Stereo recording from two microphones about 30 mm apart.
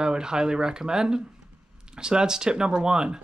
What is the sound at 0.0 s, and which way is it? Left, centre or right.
Speech, right.